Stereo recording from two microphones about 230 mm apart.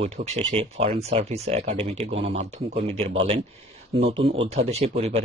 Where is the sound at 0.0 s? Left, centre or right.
Right.